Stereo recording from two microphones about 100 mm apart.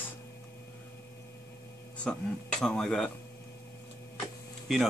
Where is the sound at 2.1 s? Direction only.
5° left (ahead or behind).